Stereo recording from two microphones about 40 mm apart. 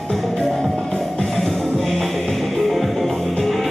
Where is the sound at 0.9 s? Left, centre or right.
Centre.